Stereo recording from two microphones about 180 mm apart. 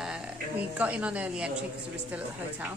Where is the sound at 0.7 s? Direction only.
10° right (ahead or behind).